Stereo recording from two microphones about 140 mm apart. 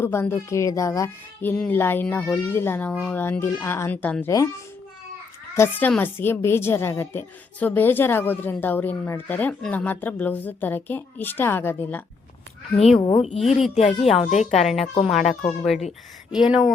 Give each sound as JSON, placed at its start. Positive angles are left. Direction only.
{"t": 0.0, "sound": "a woman's voice", "side_deg": 15}
{"t": 5.5, "sound": "a woman's voice", "side_deg": 15}
{"t": 12.7, "sound": "speech", "side_deg": 50}
{"t": 13.0, "sound": "a woman's voice", "side_deg": 35}
{"t": 13.3, "sound": "speech", "side_deg": 50}
{"t": 14.5, "sound": "speech", "side_deg": 0}